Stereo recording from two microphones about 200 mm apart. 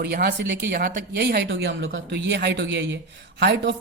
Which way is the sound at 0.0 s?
50° right (ahead or behind).